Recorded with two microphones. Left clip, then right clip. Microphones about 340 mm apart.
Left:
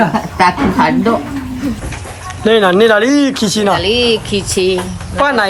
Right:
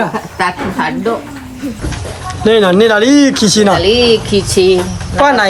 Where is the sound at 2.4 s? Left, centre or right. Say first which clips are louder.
Right 1 dB; centre.